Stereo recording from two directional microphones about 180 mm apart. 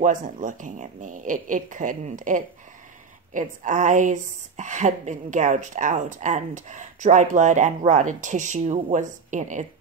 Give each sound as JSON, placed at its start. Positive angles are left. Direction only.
{"t": 0.0, "sound": "a woman's voice", "side_deg": -45}